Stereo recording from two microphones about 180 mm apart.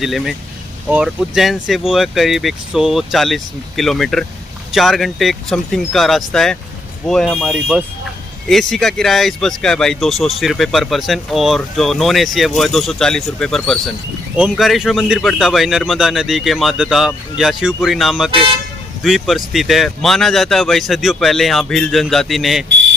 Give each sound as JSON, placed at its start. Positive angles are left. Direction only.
{"t": 0.0, "sound": "speech", "side_deg": 0}